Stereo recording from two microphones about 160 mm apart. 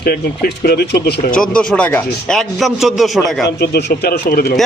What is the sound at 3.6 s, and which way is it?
Speech, 90° left.